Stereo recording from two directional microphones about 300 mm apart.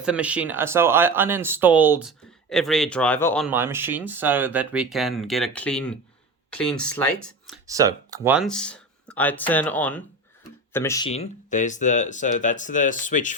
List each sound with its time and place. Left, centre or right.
0.0 s speech: centre
7.7 s speech: centre; by 13.3 s left